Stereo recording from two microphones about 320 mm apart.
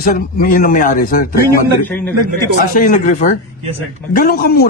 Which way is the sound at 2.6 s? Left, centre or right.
Left.